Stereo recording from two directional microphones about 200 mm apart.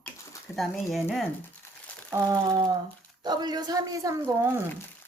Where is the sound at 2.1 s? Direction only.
15° right (ahead or behind).